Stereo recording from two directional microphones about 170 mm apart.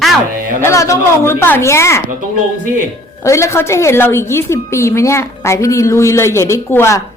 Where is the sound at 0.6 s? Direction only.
15° left (ahead or behind).